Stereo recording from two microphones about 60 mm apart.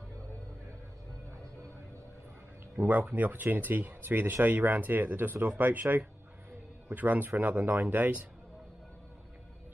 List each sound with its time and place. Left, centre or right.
2.8 s speech: right